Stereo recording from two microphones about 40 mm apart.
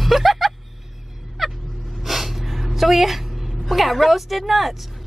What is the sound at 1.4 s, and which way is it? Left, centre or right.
Fowl, centre.